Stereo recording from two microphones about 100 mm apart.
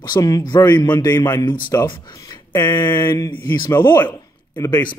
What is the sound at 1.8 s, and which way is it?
Speech, 50° left (ahead or behind).